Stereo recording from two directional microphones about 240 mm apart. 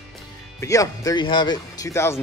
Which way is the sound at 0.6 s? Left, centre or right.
Centre.